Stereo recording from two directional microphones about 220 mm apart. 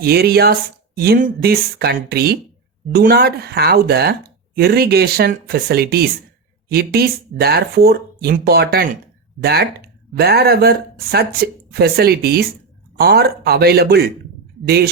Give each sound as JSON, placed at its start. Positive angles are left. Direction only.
{"t": 0.0, "sound": "speech", "side_deg": -45}